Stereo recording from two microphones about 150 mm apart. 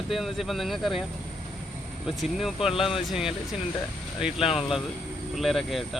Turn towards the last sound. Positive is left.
turn(degrees=0)  # may be behind; listen again after turning